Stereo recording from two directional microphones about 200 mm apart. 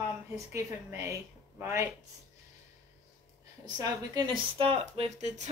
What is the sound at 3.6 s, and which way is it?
Speech, 20° right (ahead or behind).